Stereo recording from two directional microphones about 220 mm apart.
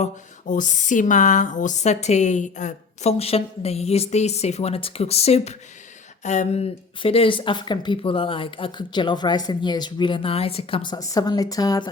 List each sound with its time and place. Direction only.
0.0 s speech: 35° left (ahead or behind); by 11.9 s 15° left (ahead or behind)